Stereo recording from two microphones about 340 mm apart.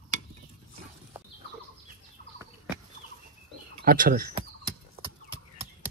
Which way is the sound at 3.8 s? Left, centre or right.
Right.